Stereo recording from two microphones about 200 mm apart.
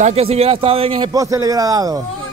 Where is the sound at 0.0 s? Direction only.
30° right (ahead or behind).